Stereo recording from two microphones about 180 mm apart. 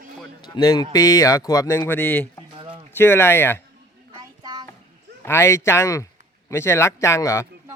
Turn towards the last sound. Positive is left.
turn(degrees=15)  # may be behind; listen again after turning